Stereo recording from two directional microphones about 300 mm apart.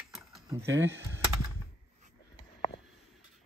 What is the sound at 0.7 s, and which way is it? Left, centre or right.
Speech, right.